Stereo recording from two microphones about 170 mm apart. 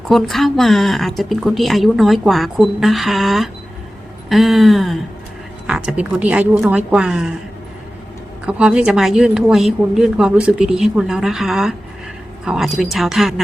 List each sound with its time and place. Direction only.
0.1 s a woman's voice: centre (ahead or behind)
8.4 s a woman's voice: 5° right (ahead or behind)